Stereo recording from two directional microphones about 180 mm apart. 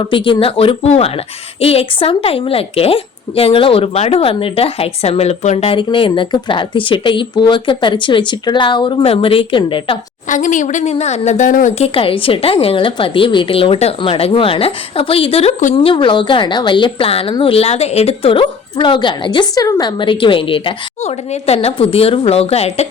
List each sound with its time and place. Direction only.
0.0 s a woman's voice: 30° left (ahead or behind)
10.2 s speech: 45° left (ahead or behind)
11.9 s a woman's voice: 30° left (ahead or behind)